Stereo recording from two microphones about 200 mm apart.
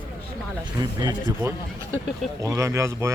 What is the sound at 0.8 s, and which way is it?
Speech, 20° right (ahead or behind).